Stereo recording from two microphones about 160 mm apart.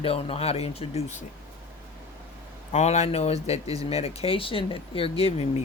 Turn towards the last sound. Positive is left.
turn(degrees=40)  # may be behind; listen again after turning